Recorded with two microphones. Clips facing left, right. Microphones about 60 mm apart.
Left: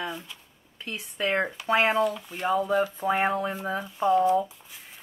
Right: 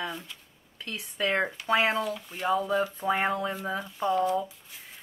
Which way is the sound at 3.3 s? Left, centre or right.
Centre.